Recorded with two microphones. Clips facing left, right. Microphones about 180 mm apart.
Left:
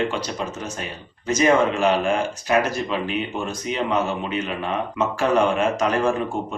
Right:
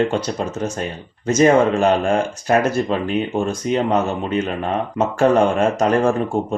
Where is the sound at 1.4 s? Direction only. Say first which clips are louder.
Right 4 dB; 45° right (ahead or behind).